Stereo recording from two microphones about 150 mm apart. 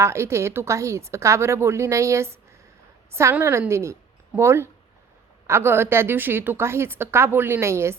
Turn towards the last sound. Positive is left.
turn(degrees=-15)  # may be behind; listen again after turning